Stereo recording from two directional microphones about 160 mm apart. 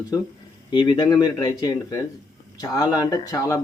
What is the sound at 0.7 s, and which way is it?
Speech, 30° left (ahead or behind).